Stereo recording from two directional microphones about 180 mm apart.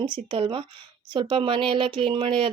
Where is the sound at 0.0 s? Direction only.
25° right (ahead or behind).